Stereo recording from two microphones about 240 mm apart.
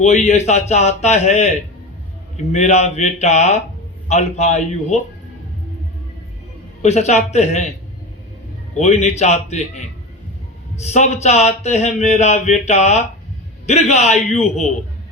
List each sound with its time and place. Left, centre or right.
0.0 s speech: left
6.8 s speech: left
8.8 s speech: left